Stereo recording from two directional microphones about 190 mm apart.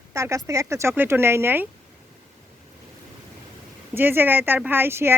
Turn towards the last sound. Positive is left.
turn(degrees=-10)  # may be behind; listen again after turning